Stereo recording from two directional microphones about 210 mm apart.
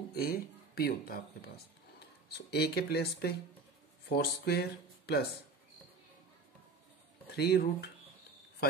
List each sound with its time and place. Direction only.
0.1 s speech: 45° left (ahead or behind)
7.3 s speech: 50° left (ahead or behind)